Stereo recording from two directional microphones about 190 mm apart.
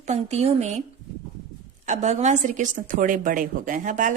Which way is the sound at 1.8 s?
35° right (ahead or behind).